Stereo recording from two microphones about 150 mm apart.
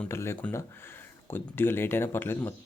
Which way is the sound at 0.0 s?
15° left (ahead or behind).